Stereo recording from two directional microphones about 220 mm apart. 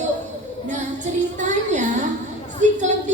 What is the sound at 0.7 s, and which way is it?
Female singing, 35° right (ahead or behind).